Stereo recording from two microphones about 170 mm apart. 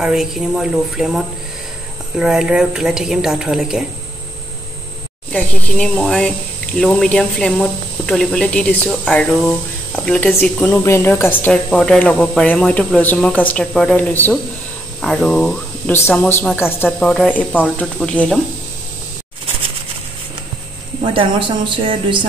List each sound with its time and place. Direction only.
0.0 s speech: 5° right (ahead or behind)
5.3 s speech: 5° left (ahead or behind)
9.3 s speech: 5° right (ahead or behind)
9.9 s speech: 5° left (ahead or behind)
21.0 s a woman's voice: 30° right (ahead or behind)